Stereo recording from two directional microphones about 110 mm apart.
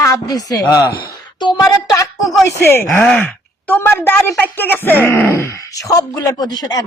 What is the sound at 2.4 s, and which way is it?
Speech, 20° left (ahead or behind).